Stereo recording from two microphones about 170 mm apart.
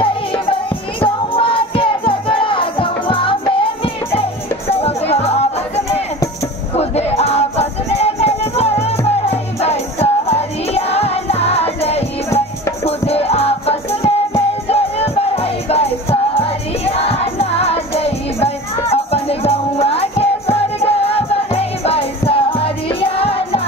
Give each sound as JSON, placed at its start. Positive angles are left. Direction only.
{"t": 1.0, "sound": "music", "side_deg": 30}
{"t": 6.8, "sound": "music", "side_deg": 40}